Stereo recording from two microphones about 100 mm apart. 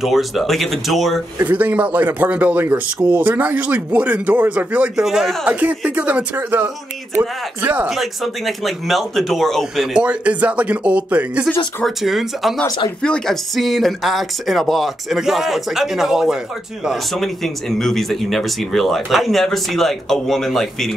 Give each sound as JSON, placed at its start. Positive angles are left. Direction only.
{"t": 0.0, "sound": "speech", "side_deg": 0}
{"t": 1.4, "sound": "speech", "side_deg": -15}
{"t": 7.9, "sound": "speech", "side_deg": 0}
{"t": 9.9, "sound": "speech", "side_deg": -10}
{"t": 11.8, "sound": "speech", "side_deg": 0}